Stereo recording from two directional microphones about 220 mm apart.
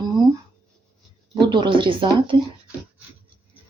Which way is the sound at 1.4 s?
20° right (ahead or behind).